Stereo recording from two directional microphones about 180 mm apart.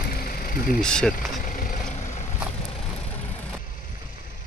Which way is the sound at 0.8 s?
5° left (ahead or behind).